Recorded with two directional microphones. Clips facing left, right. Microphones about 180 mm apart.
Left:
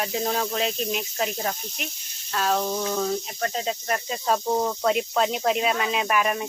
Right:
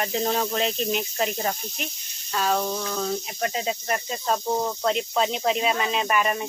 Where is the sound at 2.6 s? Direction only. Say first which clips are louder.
Left 2 dB; 15° left (ahead or behind).